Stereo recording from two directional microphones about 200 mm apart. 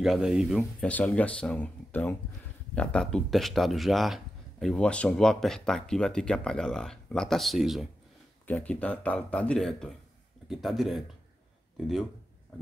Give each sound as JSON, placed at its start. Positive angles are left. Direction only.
{"t": 0.0, "sound": "speech", "side_deg": 0}